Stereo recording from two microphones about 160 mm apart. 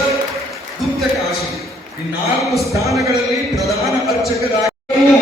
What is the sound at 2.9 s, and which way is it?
Speech, 20° right (ahead or behind).